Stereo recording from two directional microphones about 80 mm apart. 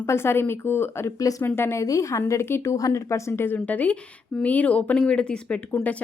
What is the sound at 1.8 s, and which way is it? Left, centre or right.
Speech, left.